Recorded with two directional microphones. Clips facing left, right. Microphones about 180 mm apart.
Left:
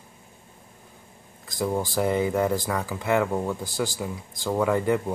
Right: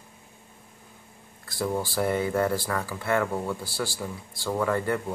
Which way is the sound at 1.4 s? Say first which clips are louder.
Left 2 dB; 15° left (ahead or behind).